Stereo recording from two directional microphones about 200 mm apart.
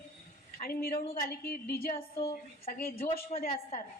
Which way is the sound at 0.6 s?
50° left (ahead or behind).